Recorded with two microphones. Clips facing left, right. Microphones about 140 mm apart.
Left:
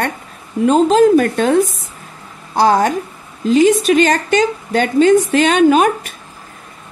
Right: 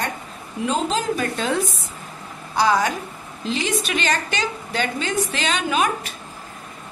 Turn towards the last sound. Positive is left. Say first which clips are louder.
# left 11 dB
turn(degrees=50)  # may be behind; listen again after turning